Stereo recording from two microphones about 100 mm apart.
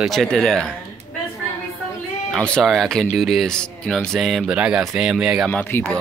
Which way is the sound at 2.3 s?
5° left (ahead or behind).